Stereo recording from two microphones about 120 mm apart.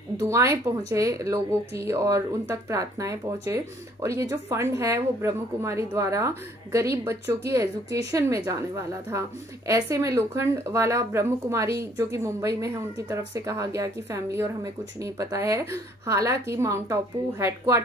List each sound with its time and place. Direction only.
0.2 s speech: 25° right (ahead or behind)